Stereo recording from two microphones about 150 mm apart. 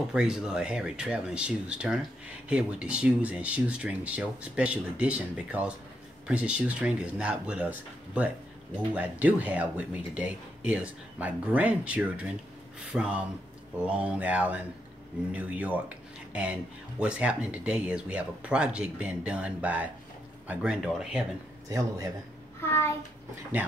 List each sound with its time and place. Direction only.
0.1 s speech: 5° right (ahead or behind)
21.6 s a man's voice: 20° right (ahead or behind)
22.6 s a child's voice: 15° left (ahead or behind)